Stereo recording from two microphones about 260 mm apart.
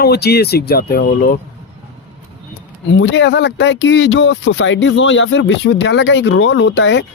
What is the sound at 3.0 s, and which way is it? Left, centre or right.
Speech, left.